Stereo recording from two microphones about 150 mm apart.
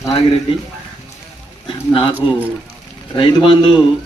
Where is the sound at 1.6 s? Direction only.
35° left (ahead or behind).